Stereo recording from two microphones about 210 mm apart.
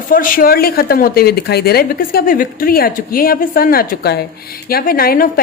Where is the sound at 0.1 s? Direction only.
45° left (ahead or behind).